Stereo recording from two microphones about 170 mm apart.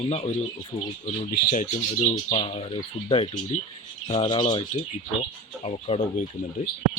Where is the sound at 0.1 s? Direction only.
40° left (ahead or behind).